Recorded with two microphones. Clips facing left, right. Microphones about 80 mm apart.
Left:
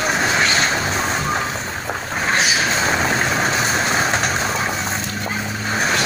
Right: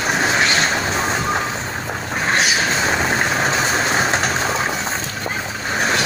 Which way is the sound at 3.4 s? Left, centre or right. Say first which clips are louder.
Right 1 dB; right.